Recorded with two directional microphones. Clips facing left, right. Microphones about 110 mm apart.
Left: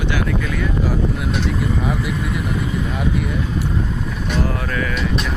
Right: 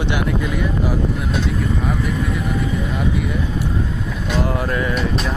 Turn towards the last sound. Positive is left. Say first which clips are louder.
# right 1 dB
turn(degrees=-40)  # may be behind; listen again after turning